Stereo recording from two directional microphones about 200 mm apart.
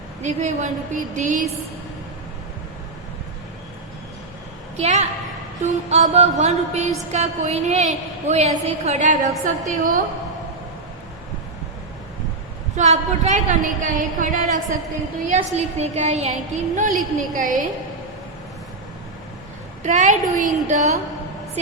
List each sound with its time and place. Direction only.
0.2 s a woman's voice: 35° right (ahead or behind)
4.8 s a woman's voice: 35° right (ahead or behind)
12.7 s a woman's voice: 35° right (ahead or behind)
19.8 s a woman's voice: 40° right (ahead or behind)